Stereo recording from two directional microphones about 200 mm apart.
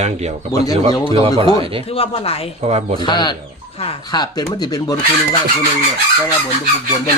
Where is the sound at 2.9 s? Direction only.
20° left (ahead or behind).